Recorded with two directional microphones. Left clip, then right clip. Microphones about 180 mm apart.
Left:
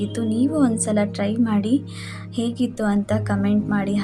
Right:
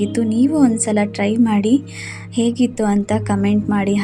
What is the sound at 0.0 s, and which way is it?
A woman's voice, 10° right (ahead or behind).